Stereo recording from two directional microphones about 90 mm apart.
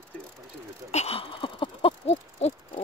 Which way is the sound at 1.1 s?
80° left.